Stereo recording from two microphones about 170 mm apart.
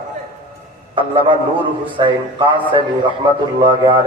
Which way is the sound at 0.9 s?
30° right (ahead or behind).